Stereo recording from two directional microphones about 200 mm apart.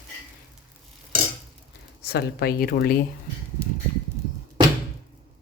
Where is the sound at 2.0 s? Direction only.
50° left (ahead or behind).